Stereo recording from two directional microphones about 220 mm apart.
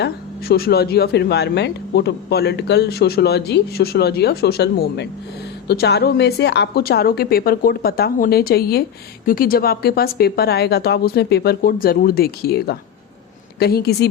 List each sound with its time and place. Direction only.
0.0 s a woman's voice: 45° left (ahead or behind)